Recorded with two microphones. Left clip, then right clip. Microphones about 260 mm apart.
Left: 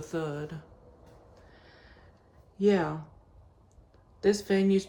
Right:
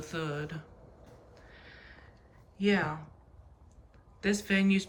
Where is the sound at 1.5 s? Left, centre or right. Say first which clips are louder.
Right 3 dB; centre.